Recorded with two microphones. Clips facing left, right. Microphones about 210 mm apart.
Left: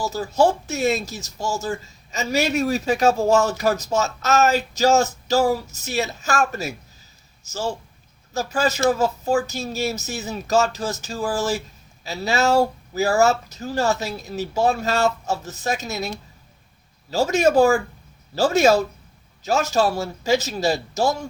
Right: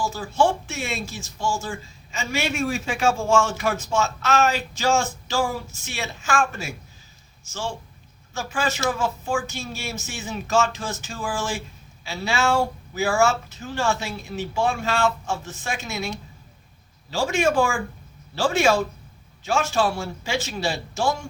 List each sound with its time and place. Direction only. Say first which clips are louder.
0.0 s speech: left 3 dB; 40° left (ahead or behind)